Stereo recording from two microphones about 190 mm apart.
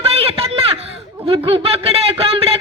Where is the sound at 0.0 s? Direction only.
30° right (ahead or behind).